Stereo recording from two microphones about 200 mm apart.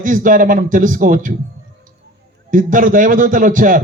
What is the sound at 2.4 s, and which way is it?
Speech, 40° right (ahead or behind).